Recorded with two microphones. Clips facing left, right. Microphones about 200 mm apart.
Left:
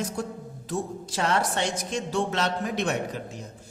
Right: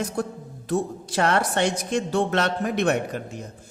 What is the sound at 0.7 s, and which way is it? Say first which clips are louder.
A man's voice: right 6 dB; 60° right (ahead or behind).